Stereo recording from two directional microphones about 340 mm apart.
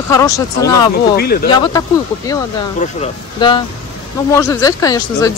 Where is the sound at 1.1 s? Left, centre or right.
Left.